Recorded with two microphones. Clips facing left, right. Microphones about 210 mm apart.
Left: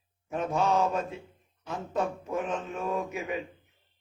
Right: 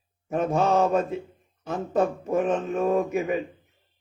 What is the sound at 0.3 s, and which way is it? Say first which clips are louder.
Mantra: right 5 dB; 45° right (ahead or behind).